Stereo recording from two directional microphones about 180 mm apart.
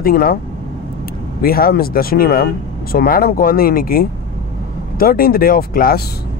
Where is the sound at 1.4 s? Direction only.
55° left (ahead or behind).